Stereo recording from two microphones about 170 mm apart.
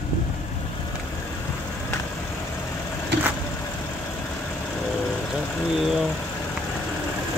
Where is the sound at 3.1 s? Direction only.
90° right.